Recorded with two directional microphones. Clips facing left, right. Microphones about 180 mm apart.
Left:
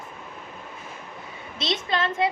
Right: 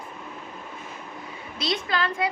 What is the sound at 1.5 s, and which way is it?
Speech, 25° left (ahead or behind).